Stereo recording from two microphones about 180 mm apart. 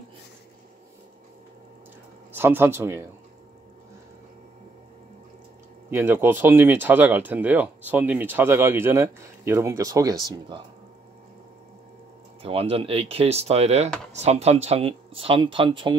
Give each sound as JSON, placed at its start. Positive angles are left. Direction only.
{"t": 2.3, "sound": "speech", "side_deg": -10}
{"t": 5.9, "sound": "speech", "side_deg": -15}
{"t": 12.4, "sound": "speech", "side_deg": -30}